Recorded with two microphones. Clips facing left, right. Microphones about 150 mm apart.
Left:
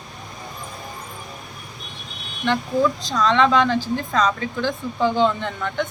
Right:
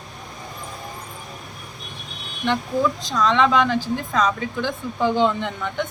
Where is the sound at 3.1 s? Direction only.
10° right (ahead or behind).